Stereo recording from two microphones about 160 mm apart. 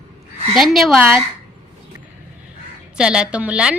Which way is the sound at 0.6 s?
Centre (ahead or behind).